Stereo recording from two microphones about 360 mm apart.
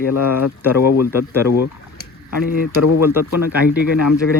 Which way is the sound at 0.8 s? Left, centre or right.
Left.